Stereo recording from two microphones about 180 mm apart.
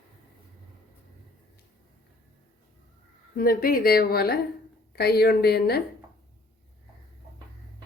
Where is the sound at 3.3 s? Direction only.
55° left (ahead or behind).